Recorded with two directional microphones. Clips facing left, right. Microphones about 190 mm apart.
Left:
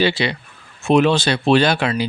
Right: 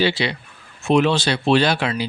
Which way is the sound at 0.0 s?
55° left (ahead or behind).